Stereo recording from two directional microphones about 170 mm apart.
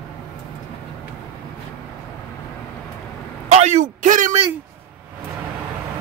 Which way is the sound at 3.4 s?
40° right (ahead or behind).